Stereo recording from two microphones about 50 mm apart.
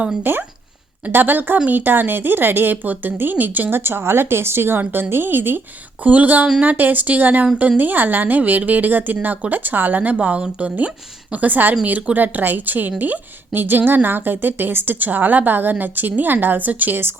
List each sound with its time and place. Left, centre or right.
0.2 s a woman's voice: right
6.0 s a woman's voice: right
10.2 s a woman's voice: right